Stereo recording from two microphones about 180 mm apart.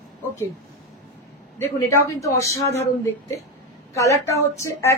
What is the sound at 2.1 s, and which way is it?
Speech, 15° left (ahead or behind).